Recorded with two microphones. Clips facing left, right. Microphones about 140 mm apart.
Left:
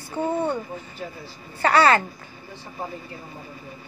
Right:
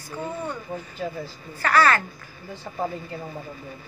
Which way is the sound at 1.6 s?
30° left (ahead or behind).